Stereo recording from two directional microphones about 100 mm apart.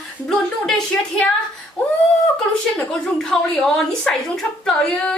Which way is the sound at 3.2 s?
5° left (ahead or behind).